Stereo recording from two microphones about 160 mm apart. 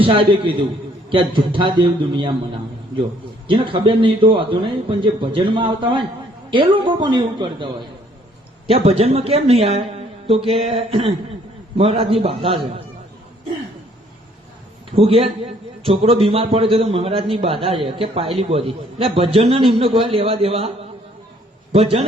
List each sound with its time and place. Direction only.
0.0 s a man's voice: 35° right (ahead or behind)
3.4 s a man's voice: 30° right (ahead or behind)
14.9 s a man's voice: 35° right (ahead or behind)